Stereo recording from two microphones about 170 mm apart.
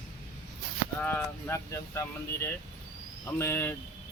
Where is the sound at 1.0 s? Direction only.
10° left (ahead or behind).